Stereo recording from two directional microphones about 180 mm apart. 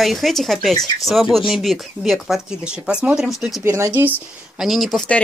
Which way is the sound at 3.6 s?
15° right (ahead or behind).